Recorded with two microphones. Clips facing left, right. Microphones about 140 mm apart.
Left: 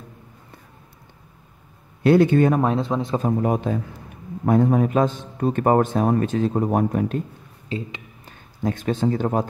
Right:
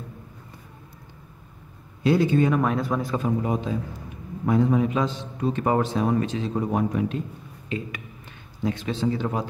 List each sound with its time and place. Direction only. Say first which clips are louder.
2.0 s speech: left 5 dB; 60° left (ahead or behind)
2.5 s speech: left 2 dB; 30° left (ahead or behind)
3.2 s a man's voice: left 4 dB; 50° left (ahead or behind)
7.7 s speech: left 1 dB; 30° left (ahead or behind)
8.6 s a man's voice: left 3 dB; 45° left (ahead or behind)